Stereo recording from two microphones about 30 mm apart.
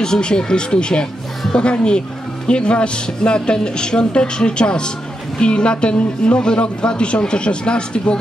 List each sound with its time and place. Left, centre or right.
0.0 s a woman's voice: left